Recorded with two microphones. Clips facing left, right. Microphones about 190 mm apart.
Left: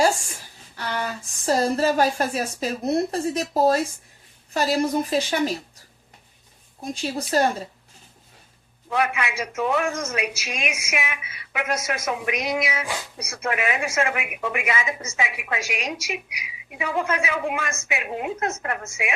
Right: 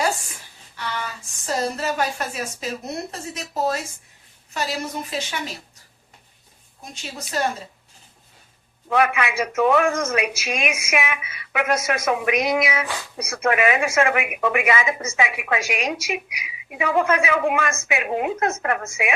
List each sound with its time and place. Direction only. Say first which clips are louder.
0.8 s speech: left 2 dB; 40° left (ahead or behind)
7.0 s speech: left 5 dB; 35° left (ahead or behind)
8.9 s speech: right 4 dB; 75° right (ahead or behind)
10.3 s speech: right 5 dB; 55° right (ahead or behind)
13.3 s speech: right 6 dB; 80° right; by 16.1 s 60° right (ahead or behind)
16.7 s speech: right 5 dB; 75° right (ahead or behind)